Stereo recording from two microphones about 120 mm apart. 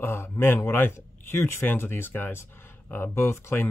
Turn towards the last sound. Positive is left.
turn(degrees=20)  # may be behind; listen again after turning